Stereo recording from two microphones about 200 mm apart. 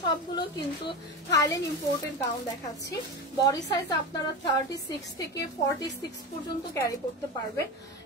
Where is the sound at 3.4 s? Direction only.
20° left (ahead or behind).